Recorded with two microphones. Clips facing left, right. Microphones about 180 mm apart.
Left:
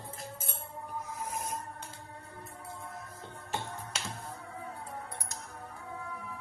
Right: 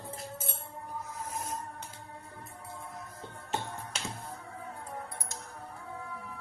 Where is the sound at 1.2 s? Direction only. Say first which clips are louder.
Left 1 dB; 15° left (ahead or behind).